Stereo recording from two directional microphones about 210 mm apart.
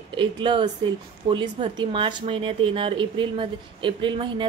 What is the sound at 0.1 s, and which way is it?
Speech, 20° right (ahead or behind).